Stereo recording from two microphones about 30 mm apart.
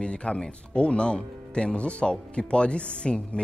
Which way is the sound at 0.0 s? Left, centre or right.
Left.